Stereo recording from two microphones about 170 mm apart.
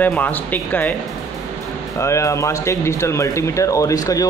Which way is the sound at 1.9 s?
15° left (ahead or behind).